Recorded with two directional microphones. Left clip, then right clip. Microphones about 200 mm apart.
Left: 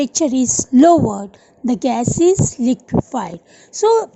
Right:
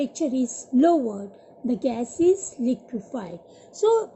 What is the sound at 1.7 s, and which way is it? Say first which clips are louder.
A woman's voice: left 8 dB; 55° left (ahead or behind).